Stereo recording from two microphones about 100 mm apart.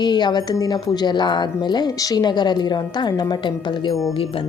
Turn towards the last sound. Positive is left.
turn(degrees=50)  # may be behind; listen again after turning